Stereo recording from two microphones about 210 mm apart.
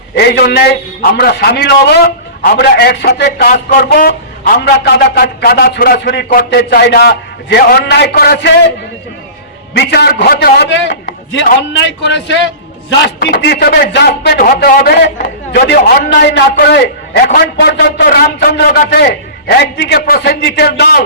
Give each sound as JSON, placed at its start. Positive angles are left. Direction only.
{"t": 0.2, "sound": "a man's voice", "side_deg": 50}
{"t": 9.7, "sound": "a man's voice", "side_deg": 50}